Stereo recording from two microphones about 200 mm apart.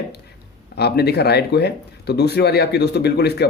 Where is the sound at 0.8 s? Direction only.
55° left (ahead or behind).